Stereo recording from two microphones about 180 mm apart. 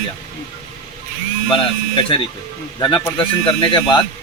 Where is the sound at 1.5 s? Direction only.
30° left (ahead or behind).